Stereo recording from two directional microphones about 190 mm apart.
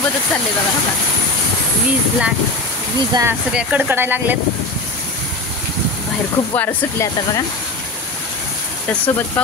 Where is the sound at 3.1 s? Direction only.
15° right (ahead or behind).